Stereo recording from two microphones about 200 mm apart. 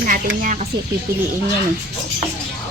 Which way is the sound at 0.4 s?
35° right (ahead or behind).